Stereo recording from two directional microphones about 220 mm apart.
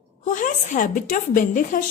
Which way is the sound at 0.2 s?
35° left (ahead or behind).